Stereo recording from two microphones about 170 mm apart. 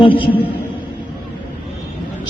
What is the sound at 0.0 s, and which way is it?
Speech, 30° left (ahead or behind).